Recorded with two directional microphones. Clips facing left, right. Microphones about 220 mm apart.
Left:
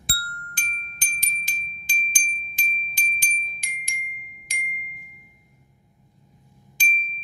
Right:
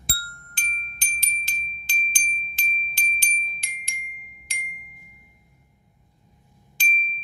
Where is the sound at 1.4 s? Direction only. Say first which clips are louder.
Even; 15° left (ahead or behind).